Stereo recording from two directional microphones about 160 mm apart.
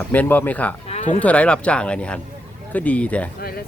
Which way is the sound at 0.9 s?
45° left (ahead or behind).